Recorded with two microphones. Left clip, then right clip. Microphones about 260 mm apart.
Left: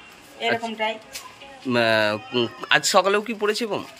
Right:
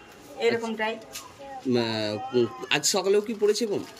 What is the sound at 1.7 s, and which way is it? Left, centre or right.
Speech, centre.